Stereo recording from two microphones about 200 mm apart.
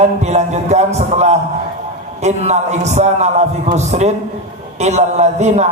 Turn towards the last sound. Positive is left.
turn(degrees=-35)  # may be behind; listen again after turning